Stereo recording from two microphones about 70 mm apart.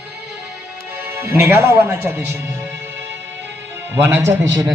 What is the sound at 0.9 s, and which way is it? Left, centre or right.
A man's voice, right.